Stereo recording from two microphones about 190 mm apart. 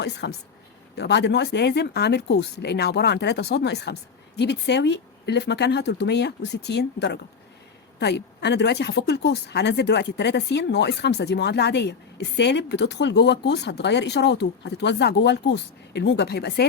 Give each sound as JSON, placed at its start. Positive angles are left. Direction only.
{"t": 0.0, "sound": "a woman's voice", "side_deg": 65}